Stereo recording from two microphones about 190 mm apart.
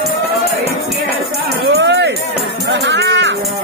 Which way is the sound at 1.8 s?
70° right (ahead or behind).